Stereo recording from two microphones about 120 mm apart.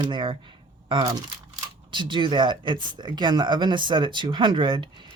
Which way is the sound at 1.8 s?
40° right (ahead or behind).